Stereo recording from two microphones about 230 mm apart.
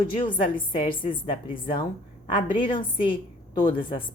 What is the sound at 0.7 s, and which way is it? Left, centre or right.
A woman's voice, left.